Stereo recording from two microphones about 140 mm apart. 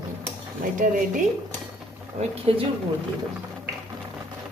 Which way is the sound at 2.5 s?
45° right (ahead or behind).